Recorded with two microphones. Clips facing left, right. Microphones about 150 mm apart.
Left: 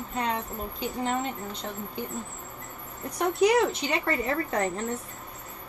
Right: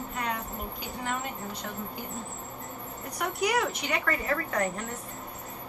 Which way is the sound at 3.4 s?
25° left (ahead or behind).